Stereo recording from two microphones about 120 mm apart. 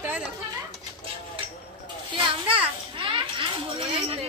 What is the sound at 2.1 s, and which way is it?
Children playing, 45° right (ahead or behind).